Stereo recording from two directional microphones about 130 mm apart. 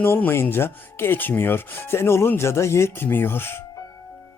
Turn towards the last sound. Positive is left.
turn(degrees=15)  # may be behind; listen again after turning